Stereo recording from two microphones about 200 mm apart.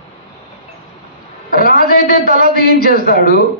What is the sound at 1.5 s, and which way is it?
A man's voice, 45° left (ahead or behind).